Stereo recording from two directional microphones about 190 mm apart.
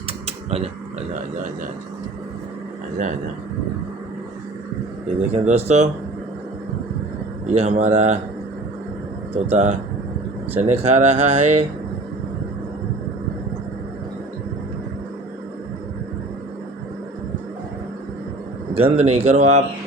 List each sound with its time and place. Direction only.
0.3 s a sound: 35° right (ahead or behind)
5.3 s speech: 35° right (ahead or behind)
7.5 s speech: 35° right (ahead or behind)
9.3 s speech: 35° right (ahead or behind)
18.7 s speech: 30° right (ahead or behind)